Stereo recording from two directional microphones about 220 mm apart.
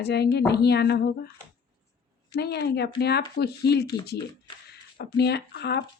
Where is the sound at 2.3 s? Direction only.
45° left (ahead or behind).